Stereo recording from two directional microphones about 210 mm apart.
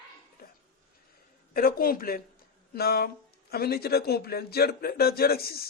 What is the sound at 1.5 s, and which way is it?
Speech, 45° left (ahead or behind).